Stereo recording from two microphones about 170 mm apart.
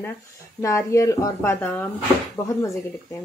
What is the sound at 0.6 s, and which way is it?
Speech, 15° left (ahead or behind).